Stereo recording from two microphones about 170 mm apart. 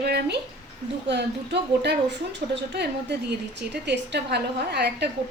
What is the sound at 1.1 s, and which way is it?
A woman's voice, 85° right.